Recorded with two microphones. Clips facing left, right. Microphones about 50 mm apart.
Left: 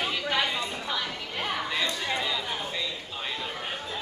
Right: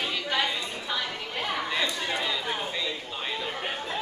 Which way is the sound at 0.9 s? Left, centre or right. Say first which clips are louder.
Even; centre.